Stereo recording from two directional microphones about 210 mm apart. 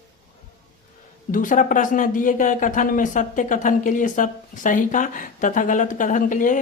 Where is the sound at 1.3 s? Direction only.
40° left (ahead or behind).